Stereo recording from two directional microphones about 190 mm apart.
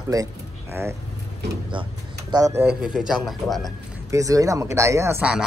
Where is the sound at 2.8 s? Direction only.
5° right (ahead or behind).